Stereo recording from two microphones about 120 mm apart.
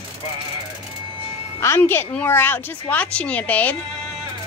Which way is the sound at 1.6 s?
20° left (ahead or behind).